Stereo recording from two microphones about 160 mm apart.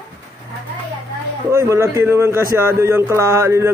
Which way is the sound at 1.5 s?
20° right (ahead or behind).